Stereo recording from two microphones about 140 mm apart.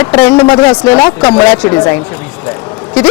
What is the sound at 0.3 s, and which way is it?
Speech, 35° left (ahead or behind).